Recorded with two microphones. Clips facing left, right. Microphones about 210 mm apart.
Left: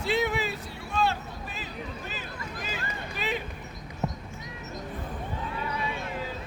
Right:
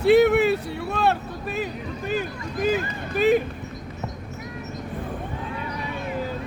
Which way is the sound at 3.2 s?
50° right (ahead or behind).